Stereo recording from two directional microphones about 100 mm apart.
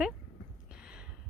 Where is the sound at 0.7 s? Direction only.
10° right (ahead or behind).